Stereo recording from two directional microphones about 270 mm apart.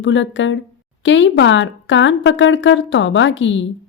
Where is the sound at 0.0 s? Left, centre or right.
Left.